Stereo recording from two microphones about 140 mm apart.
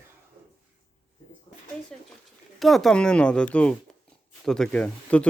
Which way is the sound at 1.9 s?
5° left (ahead or behind).